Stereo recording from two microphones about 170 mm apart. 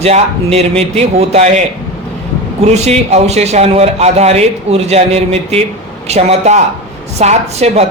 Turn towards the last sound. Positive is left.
turn(degrees=-40)  # may be behind; listen again after turning